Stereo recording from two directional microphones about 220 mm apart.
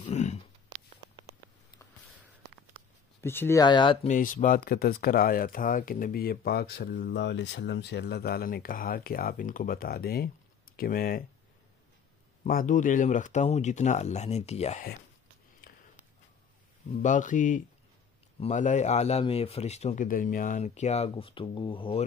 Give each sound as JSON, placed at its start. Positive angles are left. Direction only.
{"t": 0.0, "sound": "a sound", "side_deg": 30}
{"t": 3.2, "sound": "speech", "side_deg": 10}
{"t": 4.1, "sound": "speech", "side_deg": 35}
{"t": 12.4, "sound": "speech", "side_deg": 40}
{"t": 17.0, "sound": "a man's voice", "side_deg": 35}